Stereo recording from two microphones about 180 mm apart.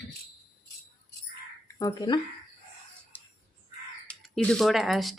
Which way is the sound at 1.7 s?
20° left (ahead or behind).